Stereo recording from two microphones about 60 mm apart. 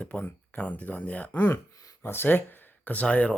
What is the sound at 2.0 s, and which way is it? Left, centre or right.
Speech, left.